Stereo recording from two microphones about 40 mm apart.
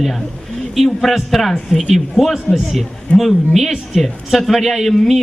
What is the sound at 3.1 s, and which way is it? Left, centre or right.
Speech, left.